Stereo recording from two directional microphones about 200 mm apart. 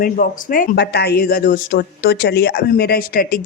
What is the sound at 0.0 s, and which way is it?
Speech, 45° left (ahead or behind).